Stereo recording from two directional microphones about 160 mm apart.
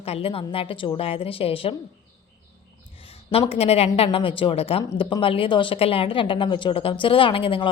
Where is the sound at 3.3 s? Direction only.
35° left (ahead or behind).